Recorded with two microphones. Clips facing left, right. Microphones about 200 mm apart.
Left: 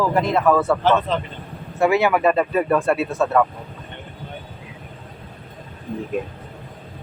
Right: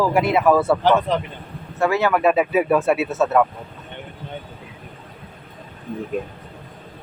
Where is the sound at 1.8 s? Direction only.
10° left (ahead or behind).